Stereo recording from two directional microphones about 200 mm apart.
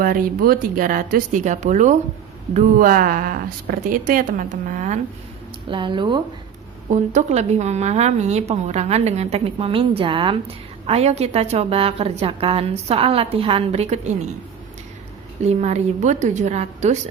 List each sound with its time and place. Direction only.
0.0 s a woman's voice: 45° right (ahead or behind)
5.6 s a woman's voice: 25° right (ahead or behind)
6.9 s a woman's voice: 35° right (ahead or behind)
15.4 s a woman's voice: 35° right (ahead or behind)